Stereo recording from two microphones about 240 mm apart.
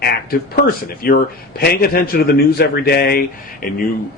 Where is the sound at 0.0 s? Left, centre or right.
Left.